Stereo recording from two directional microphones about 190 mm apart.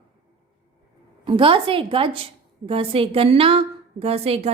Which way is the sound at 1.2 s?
30° right (ahead or behind).